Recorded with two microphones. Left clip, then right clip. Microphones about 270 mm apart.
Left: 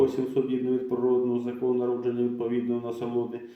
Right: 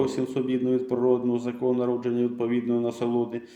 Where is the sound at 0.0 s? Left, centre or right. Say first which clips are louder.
Left 2 dB; right.